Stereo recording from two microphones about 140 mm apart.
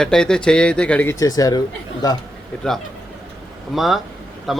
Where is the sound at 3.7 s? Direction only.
Centre (ahead or behind).